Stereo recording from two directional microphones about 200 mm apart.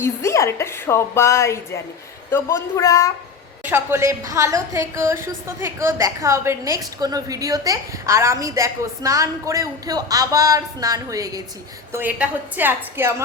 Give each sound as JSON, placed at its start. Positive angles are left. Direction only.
{"t": 0.0, "sound": "a woman's voice", "side_deg": 15}
{"t": 3.6, "sound": "a woman's voice", "side_deg": -10}